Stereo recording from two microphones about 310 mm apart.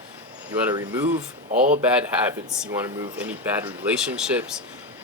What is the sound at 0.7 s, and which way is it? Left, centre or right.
Speech, centre.